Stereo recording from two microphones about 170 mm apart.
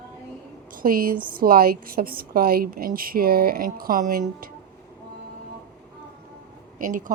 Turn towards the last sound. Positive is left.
turn(degrees=-50)  # may be behind; listen again after turning